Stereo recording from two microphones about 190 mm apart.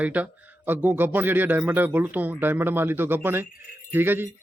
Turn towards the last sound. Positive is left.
turn(degrees=-10)  # may be behind; listen again after turning